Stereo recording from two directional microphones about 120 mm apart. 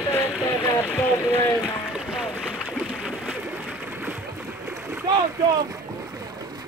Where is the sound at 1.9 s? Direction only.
5° right (ahead or behind).